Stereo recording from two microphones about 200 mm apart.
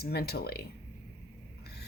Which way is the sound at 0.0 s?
50° left (ahead or behind).